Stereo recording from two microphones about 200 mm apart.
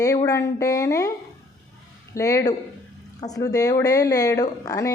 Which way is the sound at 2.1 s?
15° left (ahead or behind).